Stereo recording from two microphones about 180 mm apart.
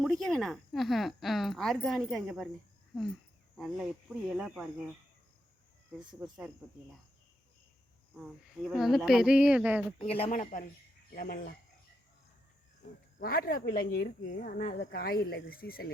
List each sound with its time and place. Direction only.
0.0 s a woman's voice: 5° left (ahead or behind)
2.9 s cricket: centre (ahead or behind)
4.3 s a woman's voice: 5° right (ahead or behind)
6.1 s a woman's voice: 5° right (ahead or behind)
8.1 s a woman's voice: 5° right (ahead or behind)
10.0 s speech: 35° left (ahead or behind)
11.1 s speech: 55° left (ahead or behind)
13.1 s speech: 55° left (ahead or behind)